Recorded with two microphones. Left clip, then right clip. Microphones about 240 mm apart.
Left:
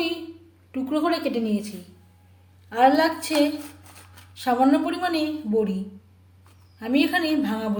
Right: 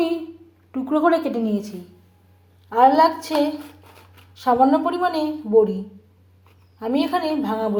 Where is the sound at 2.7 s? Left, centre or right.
Centre.